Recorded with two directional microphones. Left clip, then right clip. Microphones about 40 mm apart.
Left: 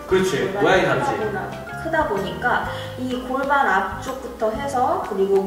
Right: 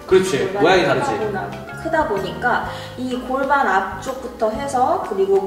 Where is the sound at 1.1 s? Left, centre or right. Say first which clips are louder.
Right 2 dB; centre.